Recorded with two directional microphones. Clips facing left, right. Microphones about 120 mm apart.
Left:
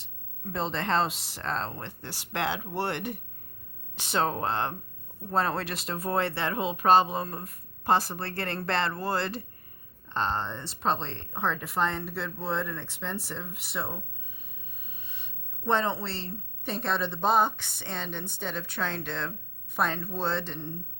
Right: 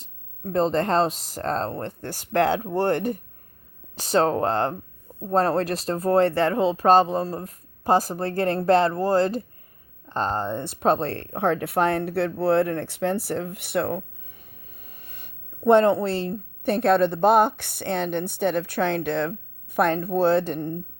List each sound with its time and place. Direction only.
0.0 s speech: 45° right (ahead or behind); by 14.0 s 65° right (ahead or behind)
14.8 s speech: 50° right (ahead or behind)